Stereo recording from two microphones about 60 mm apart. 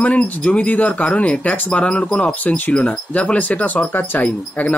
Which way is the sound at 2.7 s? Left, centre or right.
Centre.